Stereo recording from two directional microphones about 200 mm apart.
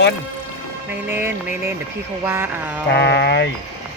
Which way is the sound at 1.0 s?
10° right (ahead or behind).